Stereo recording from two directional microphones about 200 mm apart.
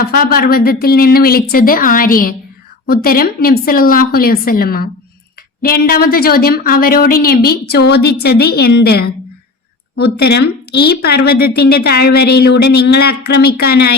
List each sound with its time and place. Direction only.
0.0 s a woman's voice: 50° left (ahead or behind)